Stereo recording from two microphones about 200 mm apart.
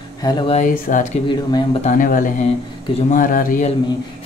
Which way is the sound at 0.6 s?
40° left (ahead or behind).